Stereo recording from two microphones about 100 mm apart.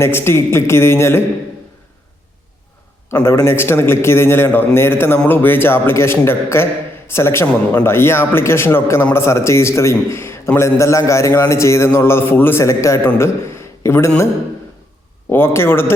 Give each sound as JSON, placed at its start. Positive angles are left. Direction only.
{"t": 0.0, "sound": "a man's voice", "side_deg": 25}
{"t": 3.2, "sound": "a man's voice", "side_deg": 25}
{"t": 15.3, "sound": "a man's voice", "side_deg": 20}